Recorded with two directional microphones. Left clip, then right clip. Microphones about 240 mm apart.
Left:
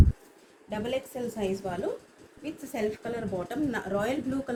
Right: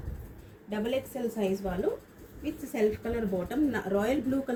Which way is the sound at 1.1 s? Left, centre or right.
Left.